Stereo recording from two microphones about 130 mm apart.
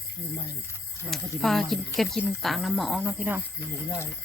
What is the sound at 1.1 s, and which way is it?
Speech, centre (ahead or behind).